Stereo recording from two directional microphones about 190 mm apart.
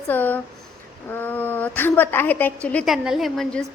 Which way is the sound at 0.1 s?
10° left (ahead or behind).